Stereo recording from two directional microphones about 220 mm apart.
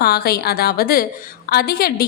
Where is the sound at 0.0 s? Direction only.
45° left (ahead or behind).